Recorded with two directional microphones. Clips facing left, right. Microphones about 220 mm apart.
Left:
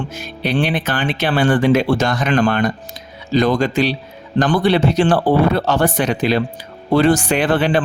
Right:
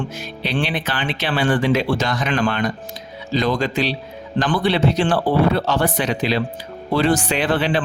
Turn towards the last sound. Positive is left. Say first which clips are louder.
# left 4 dB
turn(degrees=50)  # may be behind; listen again after turning